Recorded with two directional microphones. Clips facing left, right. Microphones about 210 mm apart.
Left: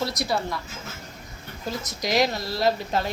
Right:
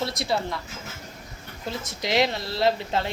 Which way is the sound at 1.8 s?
25° right (ahead or behind).